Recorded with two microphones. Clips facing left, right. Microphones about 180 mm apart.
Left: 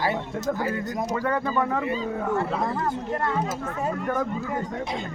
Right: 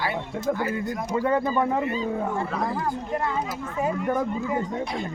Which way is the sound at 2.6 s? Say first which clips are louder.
Left 1 dB; 5° right (ahead or behind).